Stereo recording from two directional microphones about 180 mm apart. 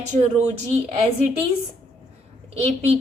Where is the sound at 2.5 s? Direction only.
35° right (ahead or behind).